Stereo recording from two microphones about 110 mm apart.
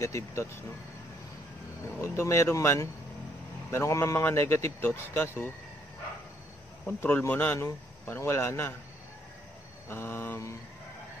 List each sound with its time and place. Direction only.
0.0 s speech: 25° left (ahead or behind)
2.0 s speech: 25° left (ahead or behind)
7.0 s speech: 20° left (ahead or behind)
9.8 s speech: 20° left (ahead or behind)